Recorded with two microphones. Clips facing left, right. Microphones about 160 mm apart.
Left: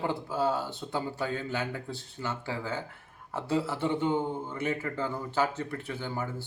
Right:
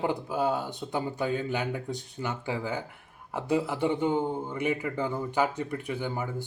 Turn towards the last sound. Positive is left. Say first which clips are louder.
# right 3 dB
turn(degrees=-15)  # may be behind; listen again after turning